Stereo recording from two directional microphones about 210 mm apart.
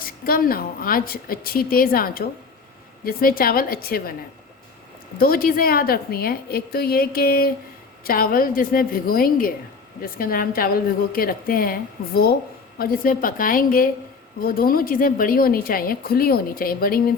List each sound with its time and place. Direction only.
0.0 s a woman's voice: 45° left (ahead or behind)
5.1 s a woman's voice: 45° left (ahead or behind)